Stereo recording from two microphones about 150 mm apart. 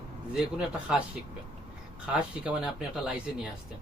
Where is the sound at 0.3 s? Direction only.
5° right (ahead or behind).